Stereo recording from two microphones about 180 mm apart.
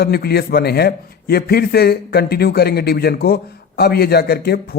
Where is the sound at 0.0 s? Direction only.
60° left (ahead or behind).